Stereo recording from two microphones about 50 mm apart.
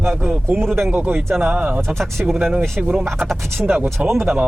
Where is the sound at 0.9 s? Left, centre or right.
Right.